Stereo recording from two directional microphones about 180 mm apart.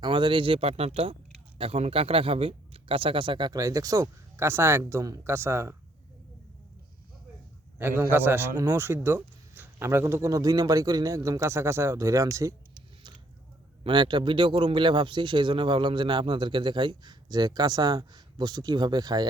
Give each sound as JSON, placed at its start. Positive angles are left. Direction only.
{"t": 0.0, "sound": "a man's voice", "side_deg": -25}
{"t": 7.8, "sound": "a man's voice", "side_deg": -10}
{"t": 13.8, "sound": "speech", "side_deg": -25}